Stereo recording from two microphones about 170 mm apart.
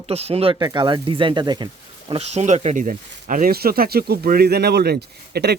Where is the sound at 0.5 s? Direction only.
25° right (ahead or behind).